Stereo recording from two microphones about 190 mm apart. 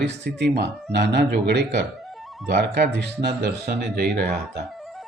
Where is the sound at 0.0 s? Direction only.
65° right (ahead or behind).